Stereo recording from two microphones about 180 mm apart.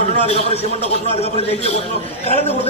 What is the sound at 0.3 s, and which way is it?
A man's voice, 35° left (ahead or behind).